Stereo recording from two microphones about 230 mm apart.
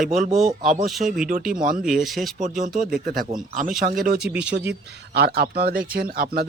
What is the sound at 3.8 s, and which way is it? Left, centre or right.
Speech, right.